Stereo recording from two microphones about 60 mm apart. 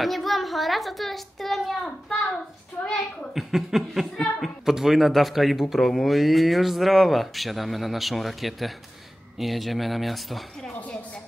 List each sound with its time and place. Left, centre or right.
0.0 s speech: centre
3.3 s speech: centre
10.8 s a woman's voice: left